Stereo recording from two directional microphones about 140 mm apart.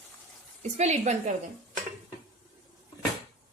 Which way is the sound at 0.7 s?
55° right (ahead or behind).